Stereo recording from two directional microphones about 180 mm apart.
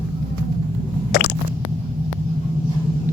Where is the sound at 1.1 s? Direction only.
55° left (ahead or behind).